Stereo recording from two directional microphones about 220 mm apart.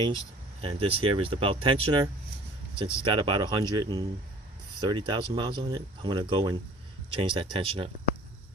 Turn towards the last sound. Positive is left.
turn(degrees=-25)  # may be behind; listen again after turning